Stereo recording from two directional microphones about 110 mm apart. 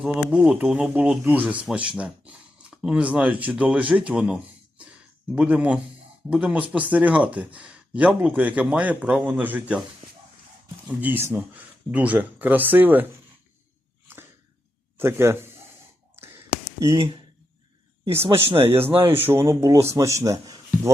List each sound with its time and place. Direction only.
0.0 s speech: 5° right (ahead or behind)
4.8 s a sound: 10° right (ahead or behind)
6.3 s speech: 10° right (ahead or behind)
10.8 s speech: 20° right (ahead or behind)
14.9 s speech: 20° right (ahead or behind)
18.4 s speech: 60° right (ahead or behind)
18.9 s speech: 20° right (ahead or behind)